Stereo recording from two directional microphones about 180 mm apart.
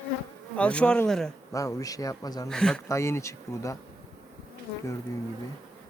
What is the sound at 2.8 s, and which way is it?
Speech, 15° left (ahead or behind).